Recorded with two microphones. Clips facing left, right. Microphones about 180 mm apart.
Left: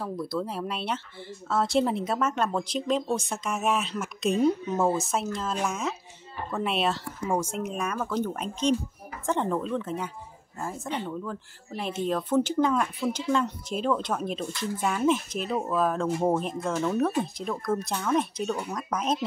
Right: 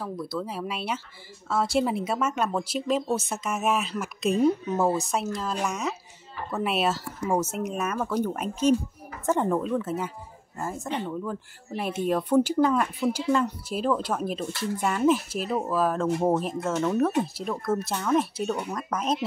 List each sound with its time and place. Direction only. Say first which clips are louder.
0.0 s speech: left 1 dB; centre (ahead or behind)